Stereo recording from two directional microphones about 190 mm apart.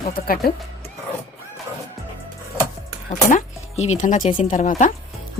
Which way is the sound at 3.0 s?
35° left (ahead or behind).